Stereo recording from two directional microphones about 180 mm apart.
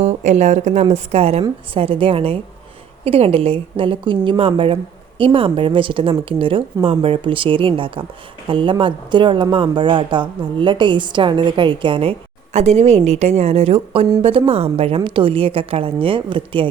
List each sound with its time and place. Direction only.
0.0 s a woman's voice: 40° right (ahead or behind)